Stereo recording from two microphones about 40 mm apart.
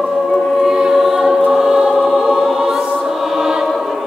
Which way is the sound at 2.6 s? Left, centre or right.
Centre.